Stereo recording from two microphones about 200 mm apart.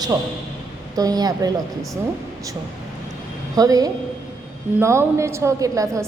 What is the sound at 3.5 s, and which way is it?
A woman's voice, 20° right (ahead or behind).